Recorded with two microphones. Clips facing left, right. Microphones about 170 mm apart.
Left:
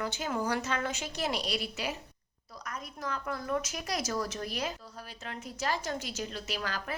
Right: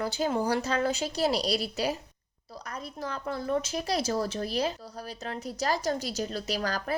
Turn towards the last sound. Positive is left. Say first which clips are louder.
# right 6 dB
turn(degrees=-40)  # may be behind; listen again after turning